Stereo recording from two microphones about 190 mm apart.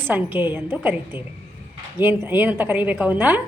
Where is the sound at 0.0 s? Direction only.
10° right (ahead or behind).